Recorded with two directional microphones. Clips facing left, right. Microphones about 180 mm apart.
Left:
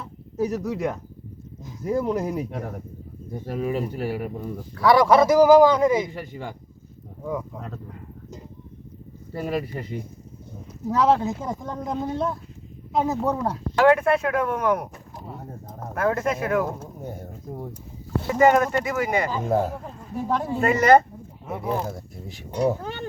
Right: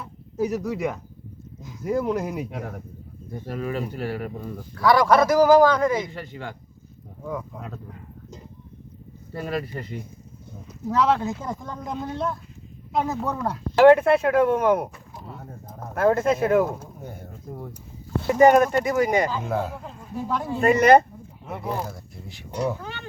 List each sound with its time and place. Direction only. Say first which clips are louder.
0.0 s a sound: even; 5° right (ahead or behind)
1.8 s speech: even; centre (ahead or behind)
4.8 s a man's voice: left 1 dB; 25° left (ahead or behind)
6.0 s speech: left 2 dB; 10° left (ahead or behind)
9.3 s speech: left 2 dB; 5° left (ahead or behind)
13.7 s speech: right 4 dB; 30° right (ahead or behind)
16.0 s speech: right 4 dB; 30° right (ahead or behind)
18.3 s speech: right 3 dB; 15° right (ahead or behind)
19.4 s speech: left 4 dB; 40° left (ahead or behind)
20.6 s speech: right 1 dB; 20° right (ahead or behind)
21.4 s speech: left 2 dB; centre (ahead or behind)
21.8 s speech: left 4 dB; 45° left (ahead or behind)